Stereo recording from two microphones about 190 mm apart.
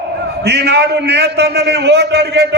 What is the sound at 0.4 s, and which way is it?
A man's voice, 60° right (ahead or behind).